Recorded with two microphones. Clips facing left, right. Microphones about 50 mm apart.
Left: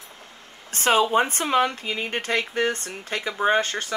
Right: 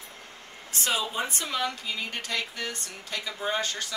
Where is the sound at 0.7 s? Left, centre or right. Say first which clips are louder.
Left 10 dB; left.